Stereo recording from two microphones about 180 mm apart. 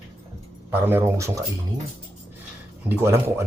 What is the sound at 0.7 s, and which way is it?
Speech, 10° right (ahead or behind).